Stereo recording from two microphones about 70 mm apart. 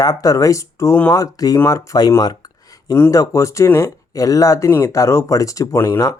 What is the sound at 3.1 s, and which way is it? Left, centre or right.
Speech, left.